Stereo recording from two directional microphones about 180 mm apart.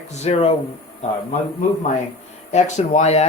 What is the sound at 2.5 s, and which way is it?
Speech, 40° left (ahead or behind).